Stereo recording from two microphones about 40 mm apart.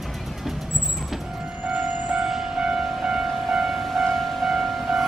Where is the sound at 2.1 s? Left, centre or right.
Right.